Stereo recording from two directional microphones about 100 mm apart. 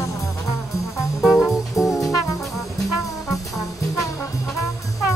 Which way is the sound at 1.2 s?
Centre (ahead or behind).